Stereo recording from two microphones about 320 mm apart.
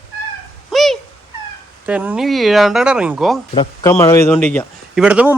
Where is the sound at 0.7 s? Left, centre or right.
Centre.